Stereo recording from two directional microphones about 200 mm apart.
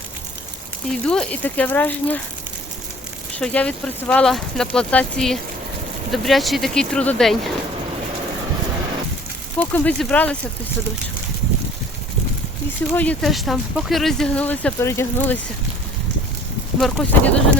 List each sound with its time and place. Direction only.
0.9 s speech: 5° left (ahead or behind)
3.3 s speech: 5° left (ahead or behind)
9.6 s speech: 5° left (ahead or behind)
12.9 s speech: 5° left (ahead or behind)
16.8 s speech: 5° left (ahead or behind)